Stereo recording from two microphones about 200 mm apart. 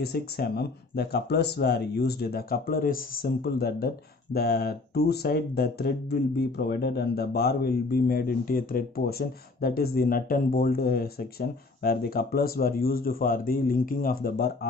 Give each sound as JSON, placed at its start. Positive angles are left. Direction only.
{"t": 0.0, "sound": "speech", "side_deg": 50}